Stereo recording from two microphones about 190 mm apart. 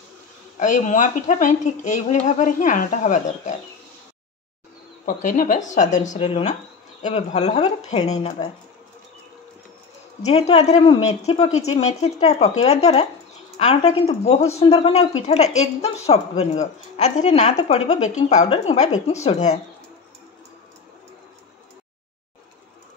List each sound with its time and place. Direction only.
0.6 s a woman's voice: 40° left (ahead or behind)
5.0 s a woman's voice: 45° left (ahead or behind)
10.2 s a woman's voice: 35° left (ahead or behind)